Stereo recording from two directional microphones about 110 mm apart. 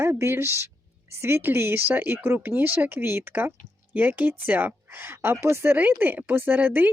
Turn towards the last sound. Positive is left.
turn(degrees=-15)  # may be behind; listen again after turning